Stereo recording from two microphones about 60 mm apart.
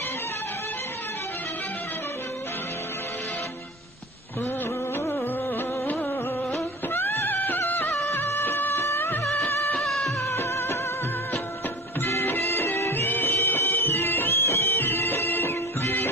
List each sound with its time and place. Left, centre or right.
6.9 s music: left
8.1 s music of bollywood: left
9.8 s music: centre
10.3 s music: left
12.0 s music: left